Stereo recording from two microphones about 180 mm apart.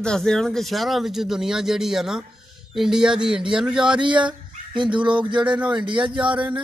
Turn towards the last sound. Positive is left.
turn(degrees=-25)  # may be behind; listen again after turning